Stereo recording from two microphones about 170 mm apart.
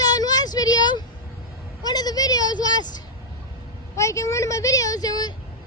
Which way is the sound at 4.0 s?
15° left (ahead or behind).